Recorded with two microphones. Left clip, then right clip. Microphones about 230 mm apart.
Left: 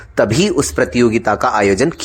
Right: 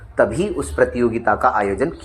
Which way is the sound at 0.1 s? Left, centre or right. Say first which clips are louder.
Left 4 dB; left.